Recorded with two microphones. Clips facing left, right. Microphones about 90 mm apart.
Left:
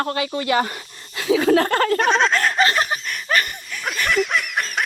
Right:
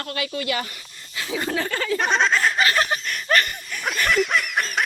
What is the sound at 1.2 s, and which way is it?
Speech, 90° left.